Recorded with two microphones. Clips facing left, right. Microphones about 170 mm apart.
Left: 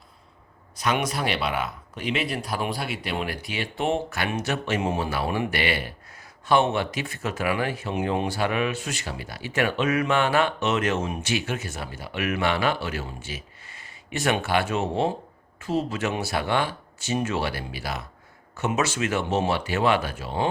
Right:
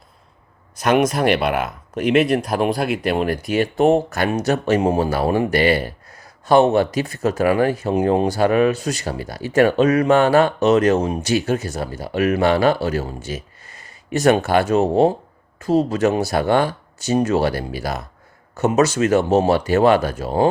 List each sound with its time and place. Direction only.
1.0 s speech: 50° right (ahead or behind)